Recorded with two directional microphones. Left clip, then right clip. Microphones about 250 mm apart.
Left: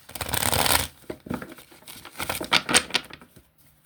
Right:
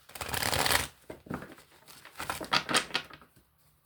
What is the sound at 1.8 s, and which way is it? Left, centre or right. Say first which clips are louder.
Crumpling: left 7 dB; left.